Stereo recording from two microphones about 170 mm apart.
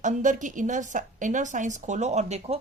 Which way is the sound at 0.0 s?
45° right (ahead or behind).